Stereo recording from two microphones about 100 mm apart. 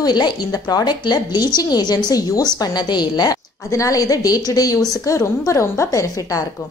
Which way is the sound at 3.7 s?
35° left (ahead or behind).